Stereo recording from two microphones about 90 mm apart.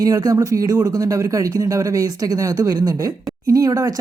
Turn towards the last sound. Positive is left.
turn(degrees=-40)  # may be behind; listen again after turning